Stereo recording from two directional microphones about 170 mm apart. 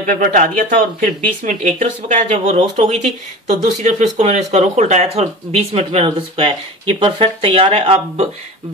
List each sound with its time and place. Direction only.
0.0 s speech: 50° right (ahead or behind)